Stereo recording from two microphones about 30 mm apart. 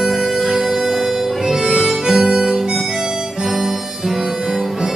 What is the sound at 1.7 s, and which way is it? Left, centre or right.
Harmonica, centre.